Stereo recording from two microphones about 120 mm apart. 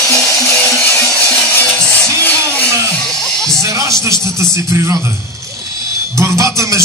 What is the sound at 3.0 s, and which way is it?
Music, 5° left (ahead or behind).